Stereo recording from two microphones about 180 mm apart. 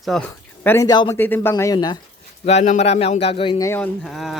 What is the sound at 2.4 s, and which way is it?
Speech, 35° left (ahead or behind).